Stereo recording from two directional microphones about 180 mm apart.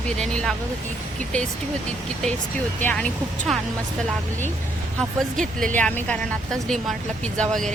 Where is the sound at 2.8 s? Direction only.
10° left (ahead or behind).